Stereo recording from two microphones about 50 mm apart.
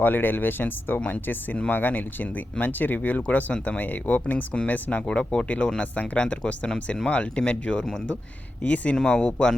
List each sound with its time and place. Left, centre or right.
0.0 s speech: left
9.0 s speech: centre